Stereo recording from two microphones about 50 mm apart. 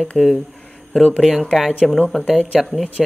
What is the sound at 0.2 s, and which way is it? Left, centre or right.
Speech, centre.